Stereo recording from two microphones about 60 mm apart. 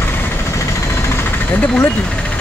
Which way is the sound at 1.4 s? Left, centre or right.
Left.